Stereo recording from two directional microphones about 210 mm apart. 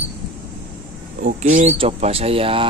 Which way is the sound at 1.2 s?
30° right (ahead or behind).